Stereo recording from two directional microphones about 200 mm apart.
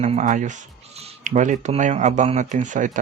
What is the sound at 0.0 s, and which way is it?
Speech, 35° right (ahead or behind).